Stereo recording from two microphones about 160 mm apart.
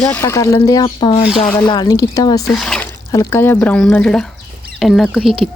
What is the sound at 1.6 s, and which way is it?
Speech, 25° left (ahead or behind).